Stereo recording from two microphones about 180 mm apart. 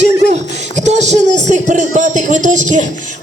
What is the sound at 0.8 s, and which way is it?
Speech, 40° right (ahead or behind).